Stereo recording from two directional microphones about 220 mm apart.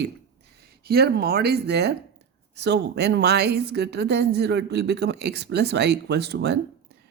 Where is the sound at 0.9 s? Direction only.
45° right (ahead or behind).